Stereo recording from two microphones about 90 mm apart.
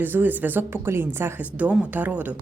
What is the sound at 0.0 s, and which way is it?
Speech, 20° right (ahead or behind).